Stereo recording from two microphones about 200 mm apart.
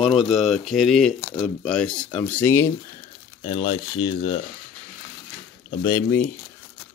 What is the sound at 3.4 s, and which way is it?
Speech, 30° left (ahead or behind).